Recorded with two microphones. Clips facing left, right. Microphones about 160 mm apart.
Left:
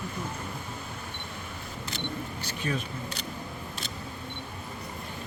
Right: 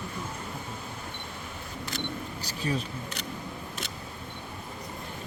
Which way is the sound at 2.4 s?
35° right (ahead or behind).